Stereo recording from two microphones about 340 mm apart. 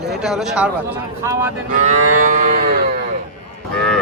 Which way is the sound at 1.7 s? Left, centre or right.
Right.